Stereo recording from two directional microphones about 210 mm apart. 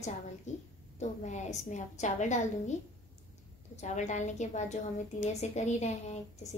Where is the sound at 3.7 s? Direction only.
35° left (ahead or behind).